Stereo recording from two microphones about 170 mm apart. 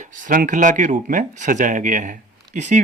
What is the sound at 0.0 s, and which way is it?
Speech, 50° right (ahead or behind).